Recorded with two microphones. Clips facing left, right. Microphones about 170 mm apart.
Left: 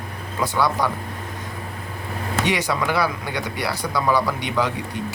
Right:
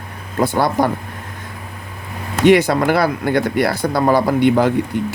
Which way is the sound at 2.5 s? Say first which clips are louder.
Right 12 dB; 55° right (ahead or behind).